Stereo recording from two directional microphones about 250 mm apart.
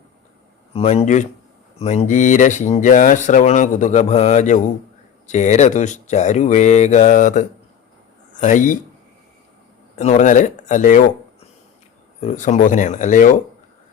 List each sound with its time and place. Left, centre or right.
0.7 s speech: left
9.9 s speech: left